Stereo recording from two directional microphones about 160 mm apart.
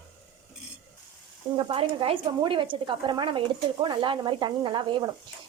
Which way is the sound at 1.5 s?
35° right (ahead or behind).